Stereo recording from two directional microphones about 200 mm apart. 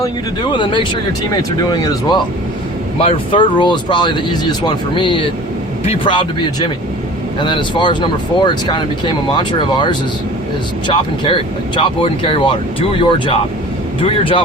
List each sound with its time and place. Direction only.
0.5 s speech: 25° left (ahead or behind)